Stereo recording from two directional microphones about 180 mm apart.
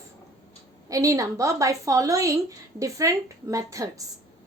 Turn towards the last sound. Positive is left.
turn(degrees=-20)  # may be behind; listen again after turning